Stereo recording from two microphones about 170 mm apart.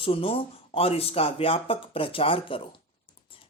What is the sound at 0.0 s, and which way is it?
Speech, 35° left (ahead or behind).